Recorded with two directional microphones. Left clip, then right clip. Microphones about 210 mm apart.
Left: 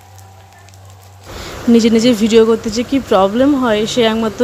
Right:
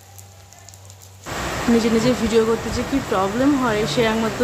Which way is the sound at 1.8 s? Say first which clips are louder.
Left 8 dB; 45° left (ahead or behind).